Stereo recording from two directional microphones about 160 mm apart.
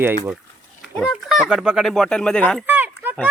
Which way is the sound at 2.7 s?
10° right (ahead or behind).